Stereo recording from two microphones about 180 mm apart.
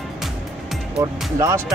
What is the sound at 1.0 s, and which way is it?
Speech, 15° right (ahead or behind).